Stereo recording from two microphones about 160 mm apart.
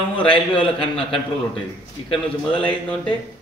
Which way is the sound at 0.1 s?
35° left (ahead or behind).